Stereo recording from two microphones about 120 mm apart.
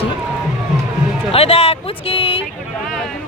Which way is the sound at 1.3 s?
55° left (ahead or behind).